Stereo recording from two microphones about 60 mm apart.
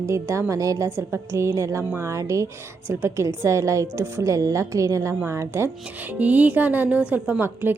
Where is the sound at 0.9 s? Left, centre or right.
Right.